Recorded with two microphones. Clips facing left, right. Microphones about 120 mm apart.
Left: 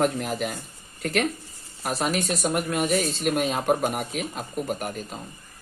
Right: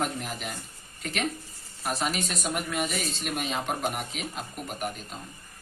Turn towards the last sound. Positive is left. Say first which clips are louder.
# left 5 dB
turn(degrees=45)  # may be behind; listen again after turning